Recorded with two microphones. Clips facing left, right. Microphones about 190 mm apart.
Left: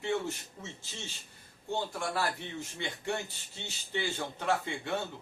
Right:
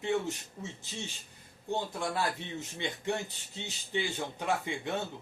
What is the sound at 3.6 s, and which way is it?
Speech, 15° right (ahead or behind).